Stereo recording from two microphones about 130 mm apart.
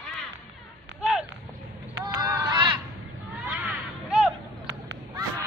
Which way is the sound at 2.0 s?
25° right (ahead or behind).